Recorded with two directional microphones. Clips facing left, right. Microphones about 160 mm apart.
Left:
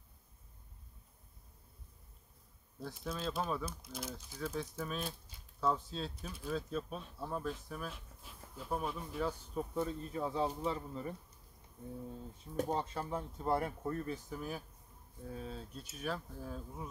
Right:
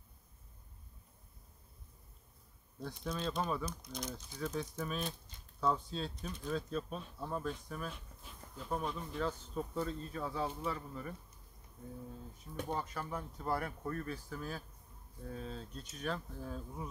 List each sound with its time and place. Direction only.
2.8 s speech: 5° left (ahead or behind); by 11.1 s 25° left (ahead or behind)
12.7 s speech: 25° left (ahead or behind); by 16.9 s centre (ahead or behind)